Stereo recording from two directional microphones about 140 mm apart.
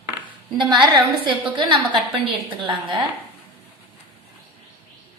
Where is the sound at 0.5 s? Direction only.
35° right (ahead or behind).